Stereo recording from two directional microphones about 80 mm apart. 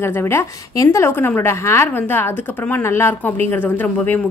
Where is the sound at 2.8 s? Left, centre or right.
Left.